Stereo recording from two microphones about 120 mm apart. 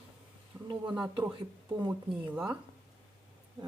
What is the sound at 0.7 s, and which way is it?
Speech, 40° right (ahead or behind).